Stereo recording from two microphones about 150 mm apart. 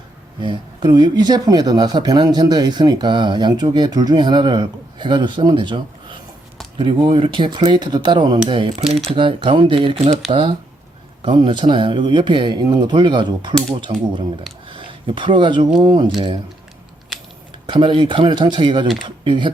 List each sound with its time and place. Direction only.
0.3 s speech: 30° right (ahead or behind)
11.2 s speech: 35° right (ahead or behind)
17.7 s speech: 35° right (ahead or behind)